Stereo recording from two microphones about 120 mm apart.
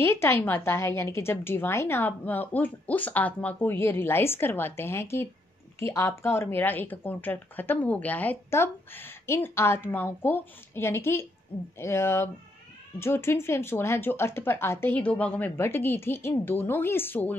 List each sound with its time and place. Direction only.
0.0 s speech: 20° left (ahead or behind)